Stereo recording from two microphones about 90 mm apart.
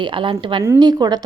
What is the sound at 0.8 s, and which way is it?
Speech, 50° right (ahead or behind).